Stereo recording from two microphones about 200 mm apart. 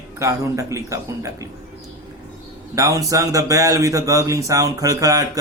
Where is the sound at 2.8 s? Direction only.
15° right (ahead or behind).